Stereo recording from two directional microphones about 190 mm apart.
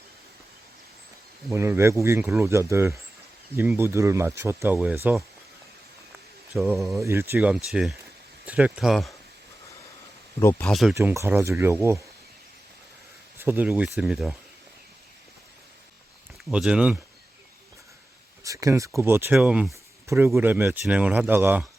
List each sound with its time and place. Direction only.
1.5 s speech: 15° right (ahead or behind)
6.5 s speech: centre (ahead or behind)
7.0 s speech: 15° right (ahead or behind)
10.7 s speech: centre (ahead or behind)
10.9 s speech: 15° right (ahead or behind)
13.4 s speech: 10° right (ahead or behind)
16.4 s speech: 5° right (ahead or behind)
18.4 s speech: 15° right (ahead or behind)